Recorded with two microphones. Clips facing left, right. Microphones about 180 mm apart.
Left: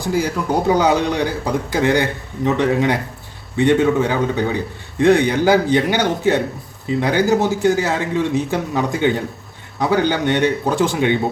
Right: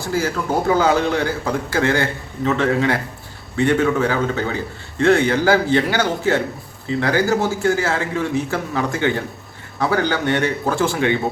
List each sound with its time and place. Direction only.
0.0 s a man's voice: 15° left (ahead or behind)